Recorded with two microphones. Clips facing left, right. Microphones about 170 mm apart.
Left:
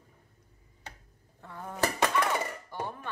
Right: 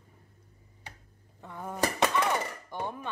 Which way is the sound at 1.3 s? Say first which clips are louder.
Right 2 dB; 15° right (ahead or behind).